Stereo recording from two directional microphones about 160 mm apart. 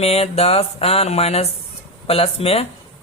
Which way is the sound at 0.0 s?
40° left (ahead or behind).